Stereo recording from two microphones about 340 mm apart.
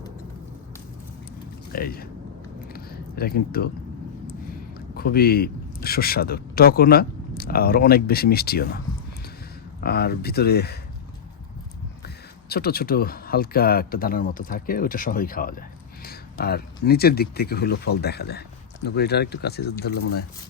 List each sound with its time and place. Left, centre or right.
1.7 s speech: left
2.7 s a sound: left
4.9 s speech: left
9.8 s speech: left
12.0 s speech: left